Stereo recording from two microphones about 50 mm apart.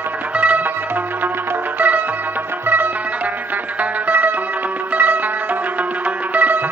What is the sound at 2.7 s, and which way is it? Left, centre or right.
Music, right.